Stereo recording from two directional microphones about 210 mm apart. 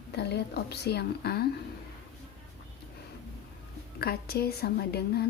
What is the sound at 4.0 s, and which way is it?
Speech, 50° left (ahead or behind).